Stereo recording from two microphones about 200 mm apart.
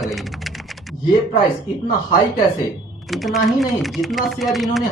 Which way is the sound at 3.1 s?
Centre (ahead or behind).